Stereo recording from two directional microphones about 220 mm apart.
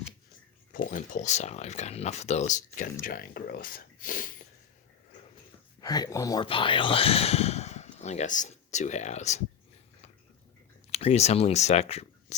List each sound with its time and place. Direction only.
0.9 s speech: 35° left (ahead or behind)
5.8 s speech: 15° left (ahead or behind)
10.9 s speech: 30° left (ahead or behind)